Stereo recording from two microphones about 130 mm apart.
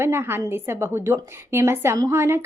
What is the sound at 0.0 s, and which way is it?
A woman's voice, 20° right (ahead or behind).